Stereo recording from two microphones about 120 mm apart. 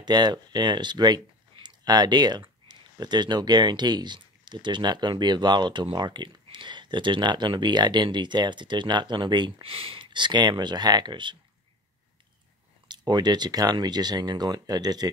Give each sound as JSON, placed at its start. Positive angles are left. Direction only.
{"t": 0.0, "sound": "speech", "side_deg": -35}
{"t": 12.8, "sound": "speech", "side_deg": -35}